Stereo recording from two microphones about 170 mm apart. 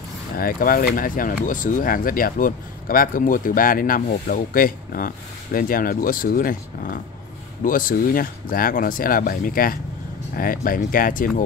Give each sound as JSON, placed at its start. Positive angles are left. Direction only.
{"t": 0.4, "sound": "speech", "side_deg": 60}